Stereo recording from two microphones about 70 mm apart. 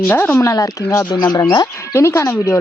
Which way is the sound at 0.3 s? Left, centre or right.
Left.